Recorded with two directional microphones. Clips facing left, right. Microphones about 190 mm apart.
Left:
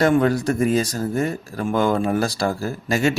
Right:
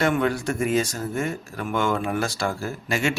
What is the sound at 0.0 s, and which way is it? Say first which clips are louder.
Speech: left 5 dB; 40° left (ahead or behind).